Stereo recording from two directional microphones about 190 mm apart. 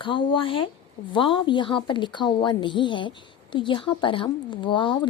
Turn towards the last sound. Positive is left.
turn(degrees=25)  # may be behind; listen again after turning